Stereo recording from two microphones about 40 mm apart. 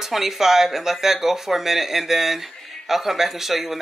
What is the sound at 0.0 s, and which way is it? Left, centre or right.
Speech, centre.